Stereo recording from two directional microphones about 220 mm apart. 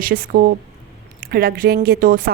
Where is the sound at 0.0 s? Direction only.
40° right (ahead or behind).